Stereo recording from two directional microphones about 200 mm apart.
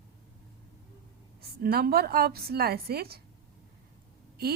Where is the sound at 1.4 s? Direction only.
50° right (ahead or behind).